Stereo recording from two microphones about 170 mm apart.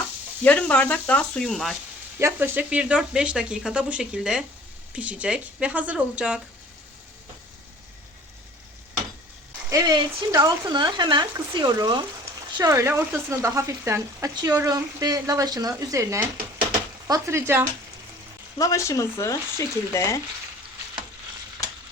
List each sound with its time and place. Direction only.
0.4 s speech: 10° left (ahead or behind)
2.1 s speech: 15° right (ahead or behind)
9.6 s speech: 20° right (ahead or behind)
18.5 s speech: 20° left (ahead or behind)